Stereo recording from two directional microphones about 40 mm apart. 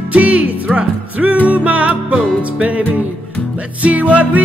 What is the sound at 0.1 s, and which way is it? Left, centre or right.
Music, right.